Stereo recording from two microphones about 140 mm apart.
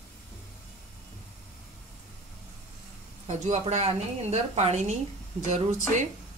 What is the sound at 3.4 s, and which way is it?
Speech, 55° right (ahead or behind).